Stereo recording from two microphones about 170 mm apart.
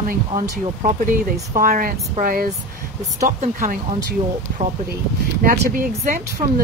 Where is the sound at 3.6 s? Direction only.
55° right (ahead or behind).